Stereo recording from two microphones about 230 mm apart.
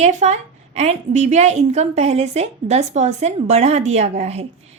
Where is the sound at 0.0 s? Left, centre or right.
Right.